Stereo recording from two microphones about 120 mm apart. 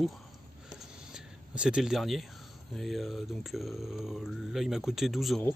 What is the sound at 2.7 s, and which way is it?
Speech, centre (ahead or behind).